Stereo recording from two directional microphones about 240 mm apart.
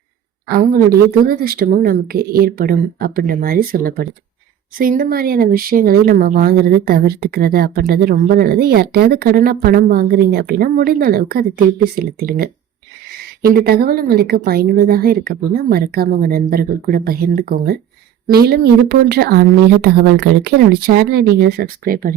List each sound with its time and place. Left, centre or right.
0.4 s speech: right